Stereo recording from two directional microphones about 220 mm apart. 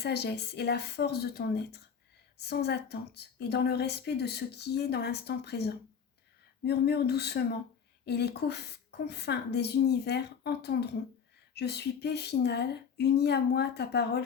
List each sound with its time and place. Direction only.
0.0 s speech: 50° left (ahead or behind)